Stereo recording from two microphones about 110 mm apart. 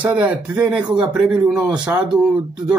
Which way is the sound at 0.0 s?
15° right (ahead or behind).